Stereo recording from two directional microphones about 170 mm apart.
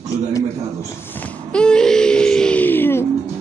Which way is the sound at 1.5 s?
5° left (ahead or behind).